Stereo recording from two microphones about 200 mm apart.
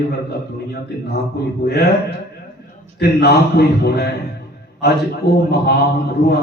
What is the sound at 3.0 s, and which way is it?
A man's voice, 55° left (ahead or behind).